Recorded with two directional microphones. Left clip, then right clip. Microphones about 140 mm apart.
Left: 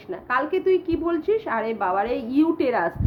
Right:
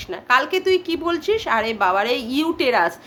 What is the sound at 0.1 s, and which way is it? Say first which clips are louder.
A woman's voice: right 5 dB; 20° right (ahead or behind).